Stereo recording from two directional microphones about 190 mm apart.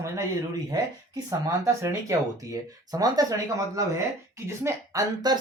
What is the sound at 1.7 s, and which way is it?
Speech, 15° right (ahead or behind).